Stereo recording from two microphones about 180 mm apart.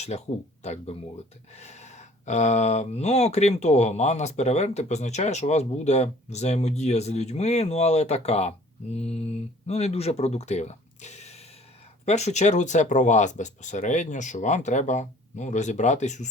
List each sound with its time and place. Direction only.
0.0 s speech: 35° left (ahead or behind)